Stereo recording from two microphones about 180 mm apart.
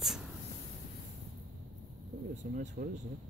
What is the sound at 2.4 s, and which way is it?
Speech, 45° right (ahead or behind).